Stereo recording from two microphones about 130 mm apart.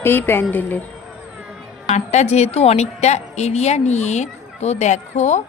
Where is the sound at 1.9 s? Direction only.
60° left (ahead or behind).